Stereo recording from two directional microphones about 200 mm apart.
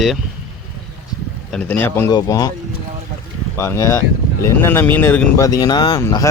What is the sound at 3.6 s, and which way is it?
Speech, 15° left (ahead or behind).